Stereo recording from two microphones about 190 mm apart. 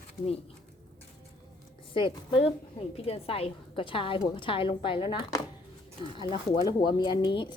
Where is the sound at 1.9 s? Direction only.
30° left (ahead or behind).